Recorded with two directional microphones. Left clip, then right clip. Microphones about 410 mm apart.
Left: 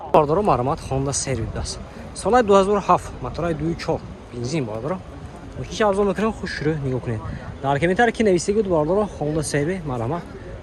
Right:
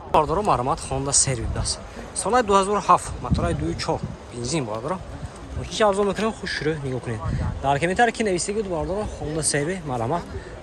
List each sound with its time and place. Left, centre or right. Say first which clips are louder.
0.1 s speech: left 3 dB; centre